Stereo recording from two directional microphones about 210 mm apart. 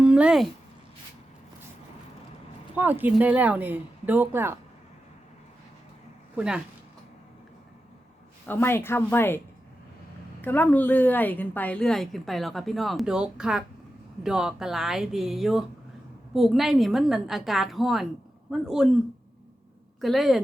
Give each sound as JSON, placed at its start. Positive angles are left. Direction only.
{"t": 0.0, "sound": "a sound", "side_deg": -5}
{"t": 2.7, "sound": "speech", "side_deg": -10}
{"t": 6.3, "sound": "speech", "side_deg": -5}
{"t": 8.4, "sound": "speech", "side_deg": 10}
{"t": 10.4, "sound": "a woman's voice", "side_deg": 10}
{"t": 20.0, "sound": "a woman's voice", "side_deg": 0}